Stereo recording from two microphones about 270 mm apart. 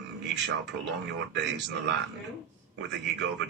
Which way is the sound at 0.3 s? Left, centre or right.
Right.